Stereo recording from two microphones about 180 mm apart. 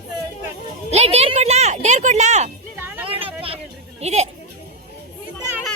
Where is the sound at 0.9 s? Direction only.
35° right (ahead or behind).